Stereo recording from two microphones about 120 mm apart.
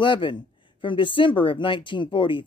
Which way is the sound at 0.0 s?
45° left (ahead or behind).